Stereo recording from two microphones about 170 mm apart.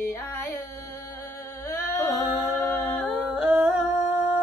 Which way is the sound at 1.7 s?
15° left (ahead or behind).